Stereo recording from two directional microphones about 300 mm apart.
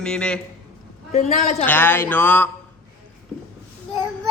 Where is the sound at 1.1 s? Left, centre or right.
Left.